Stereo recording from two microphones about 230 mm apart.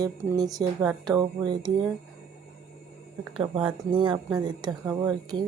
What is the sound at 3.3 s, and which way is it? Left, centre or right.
Speech, right.